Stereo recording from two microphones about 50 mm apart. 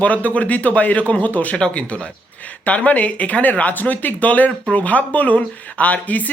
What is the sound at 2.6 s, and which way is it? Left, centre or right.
Speech, left.